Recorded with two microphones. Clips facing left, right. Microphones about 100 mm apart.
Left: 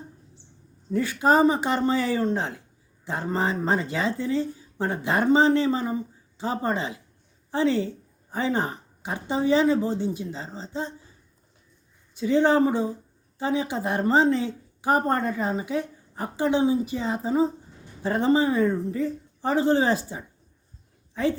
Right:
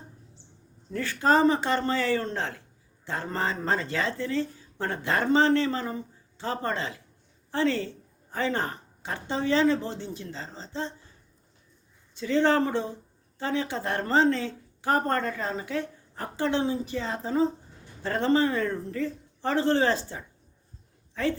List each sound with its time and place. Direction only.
0.9 s speech: 15° left (ahead or behind)
12.1 s a woman's voice: 15° left (ahead or behind)